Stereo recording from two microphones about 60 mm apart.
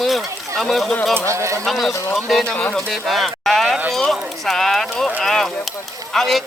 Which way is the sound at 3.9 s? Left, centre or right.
Centre.